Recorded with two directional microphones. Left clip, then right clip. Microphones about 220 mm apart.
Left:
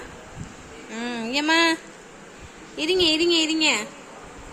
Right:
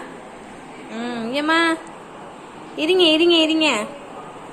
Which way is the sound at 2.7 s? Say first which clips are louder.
Right 5 dB; 15° left (ahead or behind).